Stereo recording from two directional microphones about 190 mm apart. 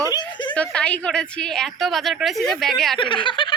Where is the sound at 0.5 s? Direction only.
5° left (ahead or behind).